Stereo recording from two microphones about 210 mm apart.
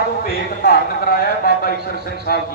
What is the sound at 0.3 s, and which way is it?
A man's voice, 45° left (ahead or behind).